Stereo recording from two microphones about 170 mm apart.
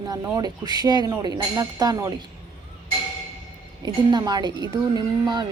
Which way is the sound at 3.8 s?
25° right (ahead or behind).